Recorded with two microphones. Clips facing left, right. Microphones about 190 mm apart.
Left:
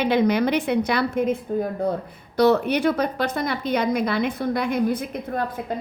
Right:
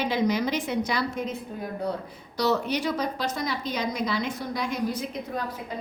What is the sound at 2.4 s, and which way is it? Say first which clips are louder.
Speech: left 7 dB; 55° left (ahead or behind).